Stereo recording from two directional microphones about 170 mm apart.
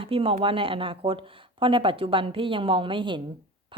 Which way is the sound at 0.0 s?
30° right (ahead or behind).